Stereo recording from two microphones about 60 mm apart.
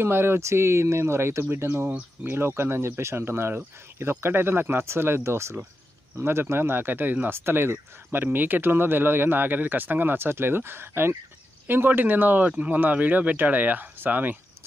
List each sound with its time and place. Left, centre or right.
0.0 s speech: right